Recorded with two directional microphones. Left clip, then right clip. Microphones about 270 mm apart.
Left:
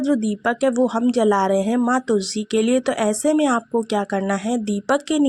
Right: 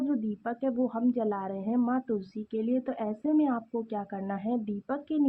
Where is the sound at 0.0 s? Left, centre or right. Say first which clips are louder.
Left 11 dB; left.